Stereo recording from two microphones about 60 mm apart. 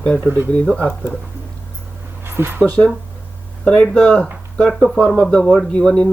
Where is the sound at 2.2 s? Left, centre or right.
Right.